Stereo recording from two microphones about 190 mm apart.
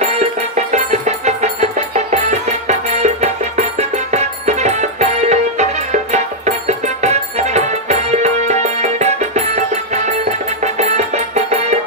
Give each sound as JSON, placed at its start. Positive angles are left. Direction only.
{"t": 0.0, "sound": "music", "side_deg": -35}